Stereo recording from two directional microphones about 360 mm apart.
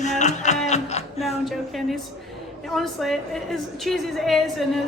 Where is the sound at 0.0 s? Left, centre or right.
Centre.